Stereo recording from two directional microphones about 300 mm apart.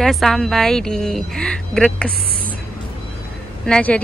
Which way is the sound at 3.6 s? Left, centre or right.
Centre.